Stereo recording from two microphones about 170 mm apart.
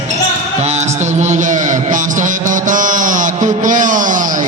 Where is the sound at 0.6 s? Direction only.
40° right (ahead or behind).